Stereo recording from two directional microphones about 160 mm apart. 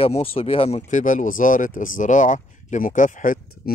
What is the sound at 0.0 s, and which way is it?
Speech, 35° left (ahead or behind).